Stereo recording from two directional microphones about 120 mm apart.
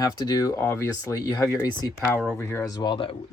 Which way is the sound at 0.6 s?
25° left (ahead or behind).